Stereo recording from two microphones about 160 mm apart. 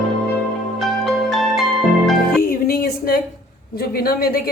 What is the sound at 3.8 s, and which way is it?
Speech, 70° left (ahead or behind).